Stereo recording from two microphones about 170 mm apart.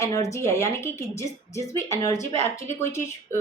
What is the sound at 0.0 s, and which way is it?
Speech, 20° left (ahead or behind).